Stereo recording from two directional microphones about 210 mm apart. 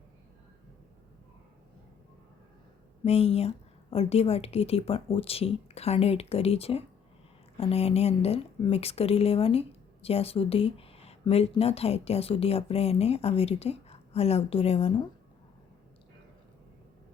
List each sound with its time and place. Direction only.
3.0 s speech: 30° left (ahead or behind)